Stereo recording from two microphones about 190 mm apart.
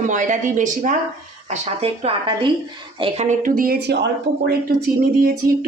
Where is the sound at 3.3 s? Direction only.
45° right (ahead or behind).